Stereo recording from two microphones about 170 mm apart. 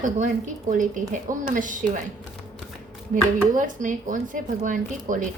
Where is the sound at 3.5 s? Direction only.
50° right (ahead or behind).